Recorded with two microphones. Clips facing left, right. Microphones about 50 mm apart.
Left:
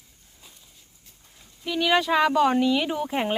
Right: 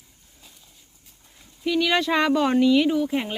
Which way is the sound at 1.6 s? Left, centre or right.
Centre.